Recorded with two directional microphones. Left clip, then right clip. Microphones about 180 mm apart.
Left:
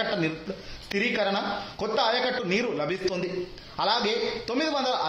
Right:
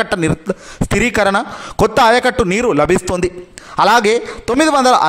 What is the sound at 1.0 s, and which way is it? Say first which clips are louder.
A man's voice: right 12 dB; 50° right (ahead or behind).